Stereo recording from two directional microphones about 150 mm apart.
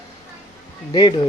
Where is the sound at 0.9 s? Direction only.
30° left (ahead or behind).